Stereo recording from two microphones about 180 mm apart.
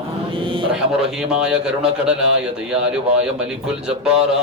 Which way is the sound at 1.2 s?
5° right (ahead or behind).